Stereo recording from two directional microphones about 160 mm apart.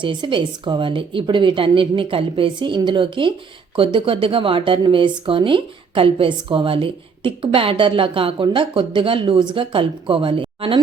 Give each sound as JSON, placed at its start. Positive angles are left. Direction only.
{"t": 0.0, "sound": "speech", "side_deg": -30}